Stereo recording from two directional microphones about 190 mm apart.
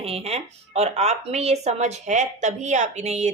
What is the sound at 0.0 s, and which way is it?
Speech, 30° right (ahead or behind).